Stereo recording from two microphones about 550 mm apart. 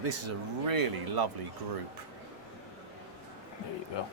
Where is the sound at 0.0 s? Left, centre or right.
Right.